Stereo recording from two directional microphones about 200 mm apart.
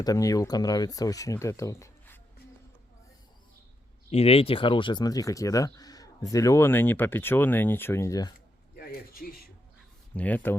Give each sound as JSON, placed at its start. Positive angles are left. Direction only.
{"t": 0.0, "sound": "speech", "side_deg": 15}
{"t": 4.1, "sound": "speech", "side_deg": 30}
{"t": 8.7, "sound": "a sound", "side_deg": 50}
{"t": 10.2, "sound": "speech", "side_deg": 10}